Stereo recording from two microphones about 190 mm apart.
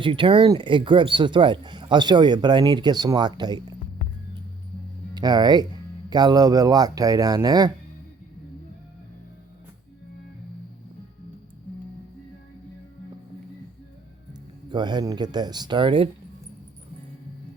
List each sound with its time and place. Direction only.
0.0 s speech: 25° right (ahead or behind)
5.1 s speech: 20° right (ahead or behind)
14.7 s speech: 25° right (ahead or behind)